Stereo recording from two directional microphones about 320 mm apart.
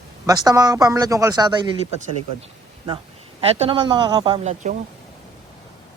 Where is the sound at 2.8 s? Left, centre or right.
Centre.